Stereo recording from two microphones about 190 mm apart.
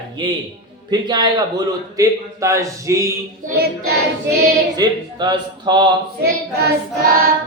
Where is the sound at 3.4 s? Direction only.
45° right (ahead or behind).